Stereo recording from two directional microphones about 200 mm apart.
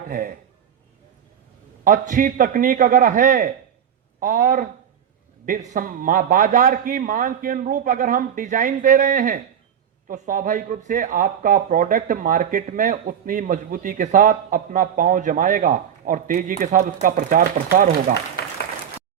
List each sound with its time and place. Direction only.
0.1 s speech: 45° right (ahead or behind)
1.8 s speech: 40° right (ahead or behind)
18.4 s applause: 55° left (ahead or behind)